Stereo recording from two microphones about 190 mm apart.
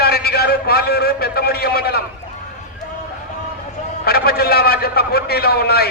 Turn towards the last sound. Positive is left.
turn(degrees=55)  # may be behind; listen again after turning